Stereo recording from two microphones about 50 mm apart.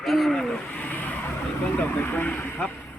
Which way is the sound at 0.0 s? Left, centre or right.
Centre.